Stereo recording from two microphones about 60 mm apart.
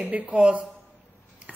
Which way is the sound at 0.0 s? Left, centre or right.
Right.